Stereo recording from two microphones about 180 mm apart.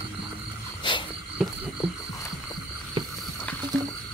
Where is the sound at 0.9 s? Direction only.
25° left (ahead or behind).